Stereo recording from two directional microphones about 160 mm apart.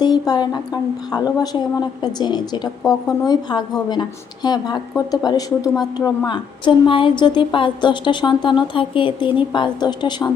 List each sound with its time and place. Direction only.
0.0 s a woman's voice: 25° left (ahead or behind)